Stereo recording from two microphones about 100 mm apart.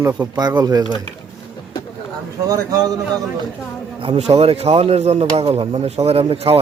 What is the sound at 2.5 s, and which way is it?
Speech, 35° right (ahead or behind).